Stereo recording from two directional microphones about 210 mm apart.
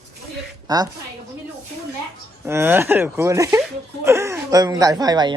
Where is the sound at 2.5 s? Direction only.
10° right (ahead or behind).